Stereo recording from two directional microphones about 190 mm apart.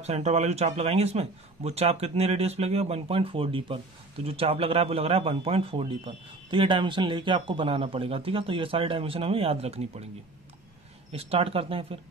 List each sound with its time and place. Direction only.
0.0 s speech: 35° right (ahead or behind)
11.1 s speech: 30° right (ahead or behind)